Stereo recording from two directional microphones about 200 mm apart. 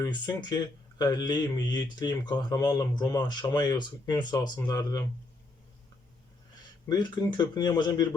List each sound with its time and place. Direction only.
0.4 s speech: 20° left (ahead or behind)
6.8 s speech: 20° left (ahead or behind)